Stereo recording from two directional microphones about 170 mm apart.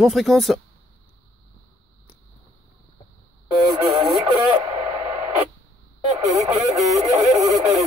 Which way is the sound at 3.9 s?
30° right (ahead or behind).